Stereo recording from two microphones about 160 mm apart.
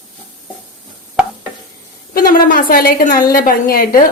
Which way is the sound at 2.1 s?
65° left (ahead or behind).